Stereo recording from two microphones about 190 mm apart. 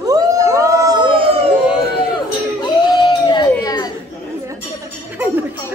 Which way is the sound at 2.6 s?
20° left (ahead or behind).